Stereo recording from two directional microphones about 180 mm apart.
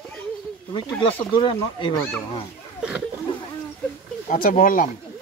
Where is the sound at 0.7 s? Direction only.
25° left (ahead or behind).